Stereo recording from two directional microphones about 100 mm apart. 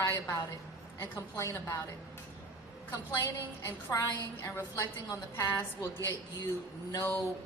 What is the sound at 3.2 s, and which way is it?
A woman's voice, 35° left (ahead or behind).